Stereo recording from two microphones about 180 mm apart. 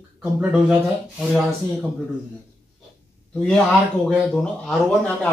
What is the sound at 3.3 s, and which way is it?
Speech, 5° left (ahead or behind).